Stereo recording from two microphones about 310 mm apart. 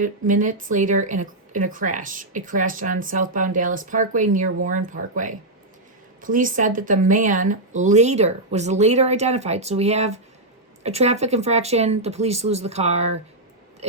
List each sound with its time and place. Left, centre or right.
0.0 s speech: right